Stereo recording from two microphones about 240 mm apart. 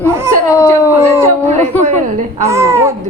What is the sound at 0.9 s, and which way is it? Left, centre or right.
Babbling, centre.